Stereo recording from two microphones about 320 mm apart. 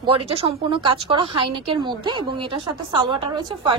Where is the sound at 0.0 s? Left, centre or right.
Centre.